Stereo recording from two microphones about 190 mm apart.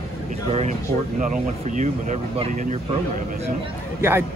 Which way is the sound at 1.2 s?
40° right (ahead or behind).